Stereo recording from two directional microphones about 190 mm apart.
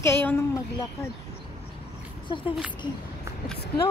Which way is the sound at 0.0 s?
10° left (ahead or behind).